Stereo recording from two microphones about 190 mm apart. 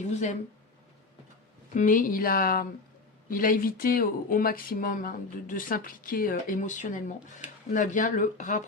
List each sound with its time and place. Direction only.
0.0 s speech: 40° left (ahead or behind)
1.7 s speech: 45° left (ahead or behind)